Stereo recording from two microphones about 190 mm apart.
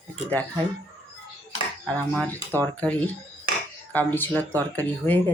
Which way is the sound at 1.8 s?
5° left (ahead or behind).